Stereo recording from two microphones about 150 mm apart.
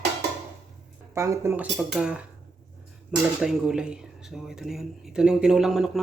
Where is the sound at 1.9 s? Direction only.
5° right (ahead or behind).